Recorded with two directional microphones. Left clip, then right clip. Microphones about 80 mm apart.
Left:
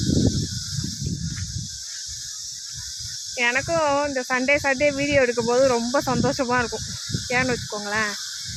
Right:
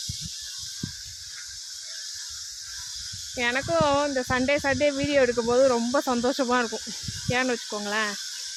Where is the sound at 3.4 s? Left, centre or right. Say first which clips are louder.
Left 4 dB; centre.